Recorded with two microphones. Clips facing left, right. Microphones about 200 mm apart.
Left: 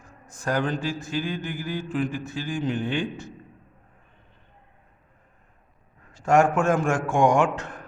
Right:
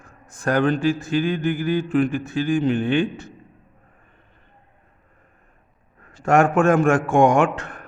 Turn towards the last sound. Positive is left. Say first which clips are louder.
# right 3 dB
turn(degrees=-60)  # may be behind; listen again after turning